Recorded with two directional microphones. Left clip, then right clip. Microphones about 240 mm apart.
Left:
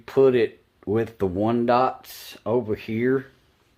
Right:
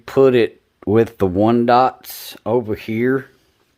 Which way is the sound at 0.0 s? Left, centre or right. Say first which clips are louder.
Right 5 dB; right.